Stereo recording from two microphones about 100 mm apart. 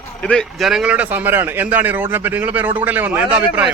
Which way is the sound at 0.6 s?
5° right (ahead or behind).